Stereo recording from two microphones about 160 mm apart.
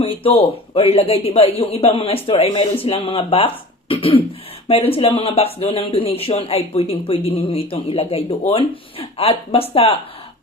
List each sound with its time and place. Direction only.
0.0 s speech: 35° left (ahead or behind)